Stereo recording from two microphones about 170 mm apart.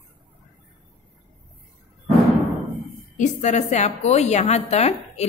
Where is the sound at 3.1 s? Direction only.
45° left (ahead or behind).